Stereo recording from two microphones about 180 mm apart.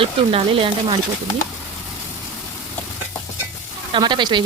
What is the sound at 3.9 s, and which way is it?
Speech, 25° right (ahead or behind).